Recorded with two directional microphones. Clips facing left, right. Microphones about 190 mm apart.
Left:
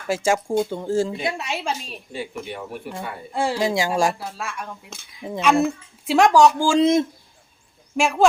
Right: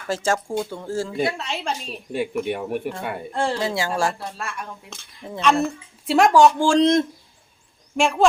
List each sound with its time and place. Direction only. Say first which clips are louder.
0.1 s speech: left 2 dB; 10° left (ahead or behind)
2.1 s speech: right 7 dB; 60° right (ahead or behind)
3.3 s speech: left 3 dB; 10° left (ahead or behind)
4.2 s speech: even; 5° left (ahead or behind)